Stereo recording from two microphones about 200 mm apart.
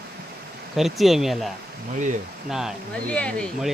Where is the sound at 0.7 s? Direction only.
Centre (ahead or behind).